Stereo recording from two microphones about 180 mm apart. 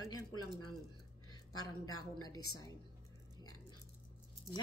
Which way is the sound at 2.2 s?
20° left (ahead or behind).